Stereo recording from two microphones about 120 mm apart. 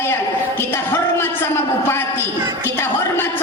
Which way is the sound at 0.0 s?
20° left (ahead or behind).